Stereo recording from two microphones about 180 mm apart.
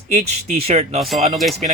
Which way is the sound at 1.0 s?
Centre (ahead or behind).